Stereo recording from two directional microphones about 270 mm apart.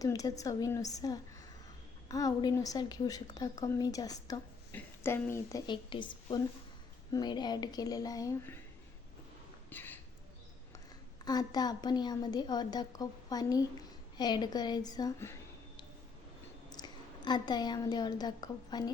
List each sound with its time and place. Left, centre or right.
0.0 s a woman's voice: centre
9.6 s a sound: centre
11.3 s a woman's voice: centre
16.6 s a woman's voice: centre